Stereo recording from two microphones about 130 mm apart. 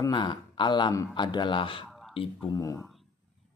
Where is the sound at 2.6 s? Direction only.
25° left (ahead or behind).